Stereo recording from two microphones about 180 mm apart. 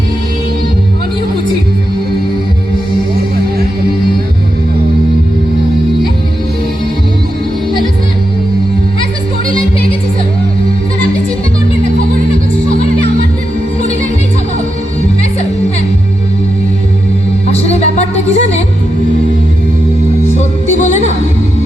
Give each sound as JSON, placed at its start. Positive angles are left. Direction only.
{"t": 17.5, "sound": "music", "side_deg": 35}
{"t": 20.3, "sound": "music", "side_deg": 40}